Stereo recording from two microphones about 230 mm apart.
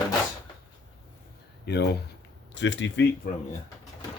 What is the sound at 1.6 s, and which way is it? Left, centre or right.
Speech, left.